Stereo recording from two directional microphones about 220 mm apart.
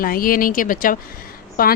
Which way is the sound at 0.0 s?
40° left (ahead or behind).